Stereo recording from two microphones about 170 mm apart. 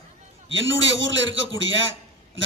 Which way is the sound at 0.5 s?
90° right.